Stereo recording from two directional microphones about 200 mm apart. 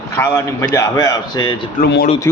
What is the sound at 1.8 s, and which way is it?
Speech, 50° left (ahead or behind).